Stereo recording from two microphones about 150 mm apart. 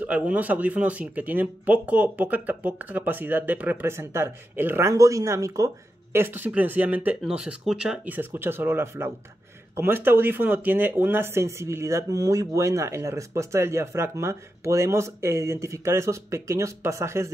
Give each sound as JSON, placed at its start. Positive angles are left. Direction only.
{"t": 0.0, "sound": "speech", "side_deg": -10}